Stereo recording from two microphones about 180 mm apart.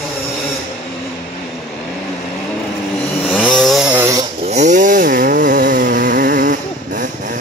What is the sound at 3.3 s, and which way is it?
Chainsaw, 5° left (ahead or behind).